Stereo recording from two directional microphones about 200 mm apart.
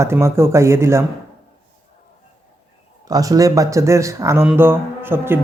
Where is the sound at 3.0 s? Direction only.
20° right (ahead or behind).